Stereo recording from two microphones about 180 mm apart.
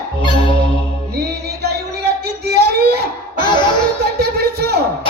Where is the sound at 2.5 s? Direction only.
65° right (ahead or behind).